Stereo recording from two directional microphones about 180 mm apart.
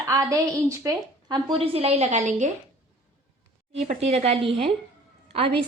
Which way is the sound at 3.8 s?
35° right (ahead or behind).